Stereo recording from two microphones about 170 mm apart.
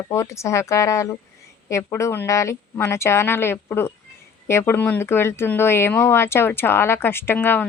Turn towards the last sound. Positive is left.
turn(degrees=10)  # may be behind; listen again after turning